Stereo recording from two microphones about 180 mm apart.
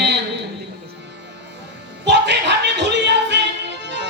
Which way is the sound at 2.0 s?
75° right (ahead or behind).